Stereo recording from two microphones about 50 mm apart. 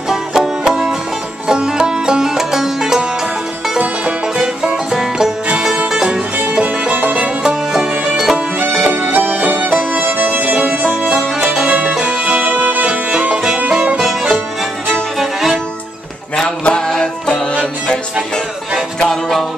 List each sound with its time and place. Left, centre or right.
0.1 s music: centre
3.7 s music: right
4.4 s music: centre
6.6 s music: right
7.4 s music: centre
8.5 s music: right
9.1 s music: right
9.6 s music: right
10.5 s music: right
11.1 s music: centre
11.6 s music: right
15.1 s music: centre
16.3 s music: centre
18.9 s music: centre